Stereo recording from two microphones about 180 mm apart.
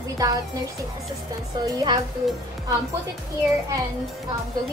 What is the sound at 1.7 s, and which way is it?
Speech, 20° right (ahead or behind).